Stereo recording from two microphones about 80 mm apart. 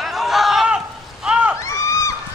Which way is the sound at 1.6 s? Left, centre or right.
Left.